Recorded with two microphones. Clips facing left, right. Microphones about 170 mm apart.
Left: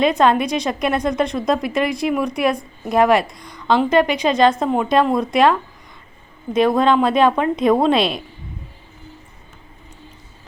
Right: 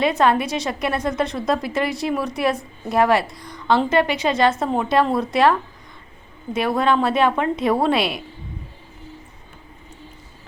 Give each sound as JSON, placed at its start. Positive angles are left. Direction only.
{"t": 0.0, "sound": "a woman's voice", "side_deg": 20}